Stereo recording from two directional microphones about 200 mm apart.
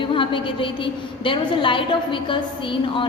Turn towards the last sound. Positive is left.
turn(degrees=25)  # may be behind; listen again after turning